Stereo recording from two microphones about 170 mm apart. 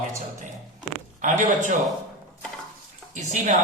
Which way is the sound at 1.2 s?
45° right (ahead or behind).